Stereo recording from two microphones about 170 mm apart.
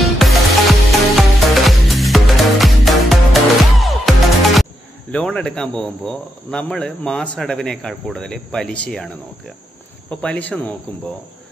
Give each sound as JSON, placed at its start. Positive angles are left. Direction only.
{"t": 0.0, "sound": "music", "side_deg": 0}
{"t": 5.1, "sound": "speech", "side_deg": 5}